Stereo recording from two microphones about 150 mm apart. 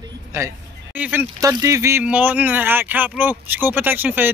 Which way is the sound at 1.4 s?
20° right (ahead or behind).